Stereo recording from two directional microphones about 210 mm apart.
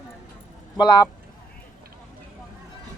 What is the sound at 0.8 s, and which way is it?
Speech, 20° left (ahead or behind).